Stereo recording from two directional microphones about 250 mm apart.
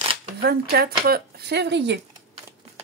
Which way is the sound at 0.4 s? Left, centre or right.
Right.